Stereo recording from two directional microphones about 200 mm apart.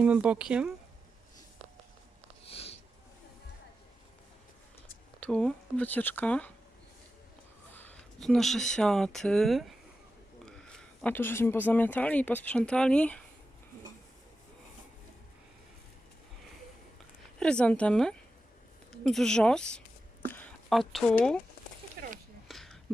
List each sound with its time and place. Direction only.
0.0 s speech: 5° right (ahead or behind)
2.5 s sniff: 30° left (ahead or behind)
5.2 s speech: 5° left (ahead or behind)
7.7 s speech: 10° left (ahead or behind)
17.4 s speech: 5° left (ahead or behind)
22.0 s a sound: 50° right (ahead or behind)
22.4 s a sound: centre (ahead or behind)